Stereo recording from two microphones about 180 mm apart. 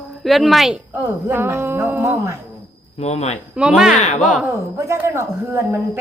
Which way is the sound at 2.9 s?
35° left (ahead or behind).